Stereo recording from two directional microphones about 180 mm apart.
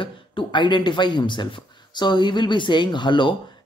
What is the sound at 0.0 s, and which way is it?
Speech, 30° left (ahead or behind).